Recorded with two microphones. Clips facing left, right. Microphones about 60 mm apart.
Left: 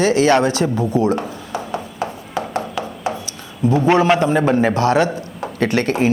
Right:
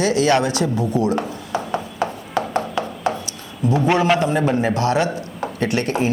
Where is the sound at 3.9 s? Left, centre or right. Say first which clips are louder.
Left 3 dB; left.